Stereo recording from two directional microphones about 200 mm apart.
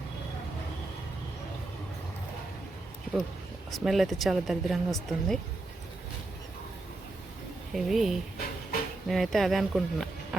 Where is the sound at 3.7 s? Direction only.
Centre (ahead or behind).